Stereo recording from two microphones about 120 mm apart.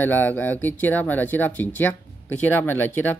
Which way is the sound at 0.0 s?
15° left (ahead or behind).